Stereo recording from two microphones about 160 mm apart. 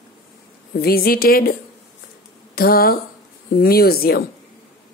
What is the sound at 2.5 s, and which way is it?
A woman's voice, 70° left (ahead or behind).